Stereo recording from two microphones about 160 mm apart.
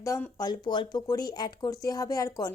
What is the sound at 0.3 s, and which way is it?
A woman's voice, 25° left (ahead or behind).